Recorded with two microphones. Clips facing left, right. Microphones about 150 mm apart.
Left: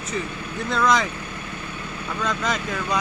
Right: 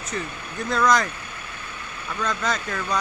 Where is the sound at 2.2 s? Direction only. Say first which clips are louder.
Even; 5° left (ahead or behind).